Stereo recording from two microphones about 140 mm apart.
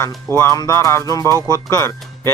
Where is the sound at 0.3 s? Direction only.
20° left (ahead or behind).